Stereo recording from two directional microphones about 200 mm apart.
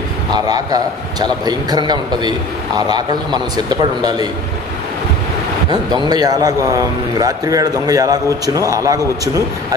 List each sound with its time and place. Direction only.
0.3 s a man's voice: 20° right (ahead or behind)
5.7 s a man's voice: 20° right (ahead or behind)